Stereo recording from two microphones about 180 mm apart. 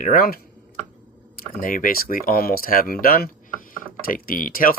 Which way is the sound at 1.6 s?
50° left (ahead or behind).